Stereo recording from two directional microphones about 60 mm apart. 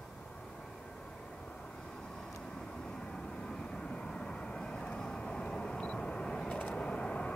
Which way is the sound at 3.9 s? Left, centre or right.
Centre.